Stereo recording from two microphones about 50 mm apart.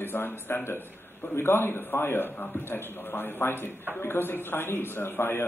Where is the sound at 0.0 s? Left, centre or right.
Left.